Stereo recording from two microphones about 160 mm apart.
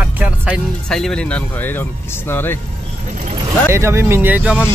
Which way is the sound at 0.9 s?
5° left (ahead or behind).